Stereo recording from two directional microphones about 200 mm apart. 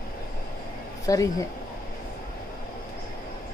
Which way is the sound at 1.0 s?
15° left (ahead or behind).